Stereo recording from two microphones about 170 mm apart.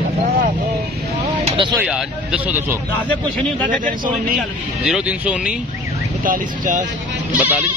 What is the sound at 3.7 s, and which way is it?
Speech, 55° right (ahead or behind).